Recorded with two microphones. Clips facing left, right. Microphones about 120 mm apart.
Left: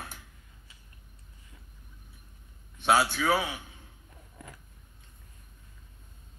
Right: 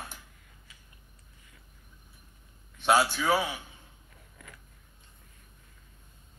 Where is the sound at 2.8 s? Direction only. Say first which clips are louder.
Even; centre (ahead or behind).